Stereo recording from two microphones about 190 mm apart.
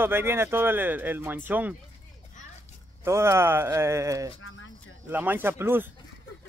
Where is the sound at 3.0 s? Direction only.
15° right (ahead or behind).